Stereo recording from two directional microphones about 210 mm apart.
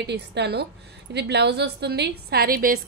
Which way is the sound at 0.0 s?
55° right (ahead or behind).